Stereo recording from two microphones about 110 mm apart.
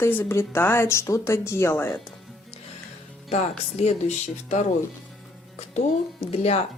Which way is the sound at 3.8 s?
75° left (ahead or behind).